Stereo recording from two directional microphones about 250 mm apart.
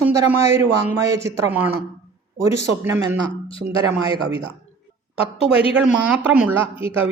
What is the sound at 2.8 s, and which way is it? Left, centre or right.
Speech, centre.